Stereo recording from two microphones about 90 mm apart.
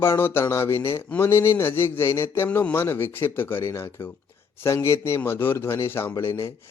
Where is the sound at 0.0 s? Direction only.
25° left (ahead or behind).